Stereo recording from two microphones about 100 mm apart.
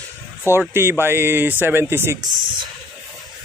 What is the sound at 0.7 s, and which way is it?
Speech, 25° right (ahead or behind).